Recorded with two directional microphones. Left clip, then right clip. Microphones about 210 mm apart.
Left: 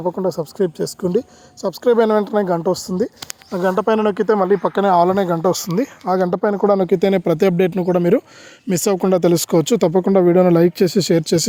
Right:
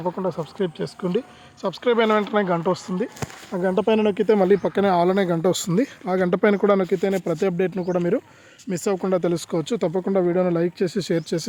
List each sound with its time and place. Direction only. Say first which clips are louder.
0.0 s speech: left 5 dB; 15° left (ahead or behind)
0.6 s speech: left 7 dB; 30° left (ahead or behind)
3.5 s speech: left 4 dB; 5° left (ahead or behind)
6.7 s speech: left 6 dB; 35° left (ahead or behind)